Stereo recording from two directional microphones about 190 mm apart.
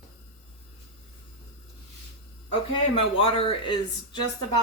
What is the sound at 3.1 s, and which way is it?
A woman's voice, 30° left (ahead or behind).